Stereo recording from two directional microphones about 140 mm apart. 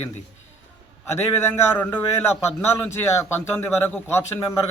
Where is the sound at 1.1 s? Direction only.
20° left (ahead or behind).